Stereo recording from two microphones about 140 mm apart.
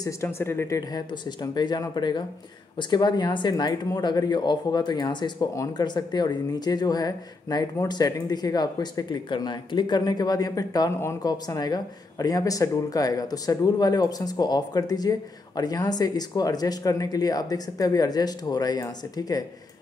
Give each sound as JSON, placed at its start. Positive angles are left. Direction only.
{"t": 0.0, "sound": "speech", "side_deg": 20}